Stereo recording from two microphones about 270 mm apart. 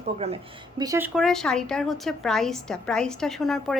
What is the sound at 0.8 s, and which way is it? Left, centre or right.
A woman's voice, centre.